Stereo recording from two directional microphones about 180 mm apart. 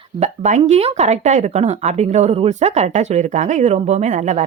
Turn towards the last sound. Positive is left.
turn(degrees=-40)  # may be behind; listen again after turning